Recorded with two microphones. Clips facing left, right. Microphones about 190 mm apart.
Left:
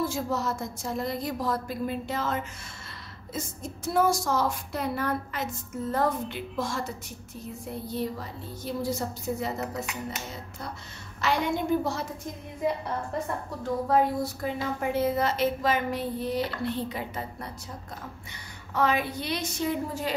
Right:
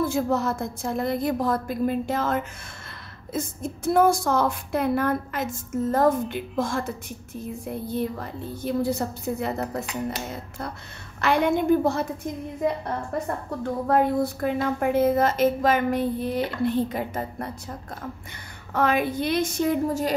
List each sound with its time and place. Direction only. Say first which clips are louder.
0.0 s a woman's voice: right 5 dB; 55° right (ahead or behind)
7.9 s a woman's voice: right 3 dB; 55° right (ahead or behind)
11.1 s a woman's voice: right 5 dB; 55° right (ahead or behind)
13.8 s speech: right 4 dB; 60° right (ahead or behind)
18.7 s speech: right 3 dB; 50° right (ahead or behind)